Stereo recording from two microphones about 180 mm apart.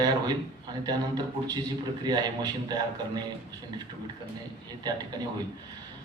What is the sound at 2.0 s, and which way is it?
Speech, 20° right (ahead or behind).